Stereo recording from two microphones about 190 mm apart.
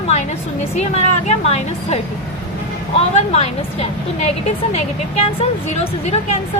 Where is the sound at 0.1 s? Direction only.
35° left (ahead or behind).